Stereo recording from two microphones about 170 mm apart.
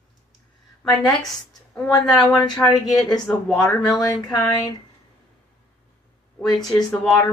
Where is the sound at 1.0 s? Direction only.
Centre (ahead or behind).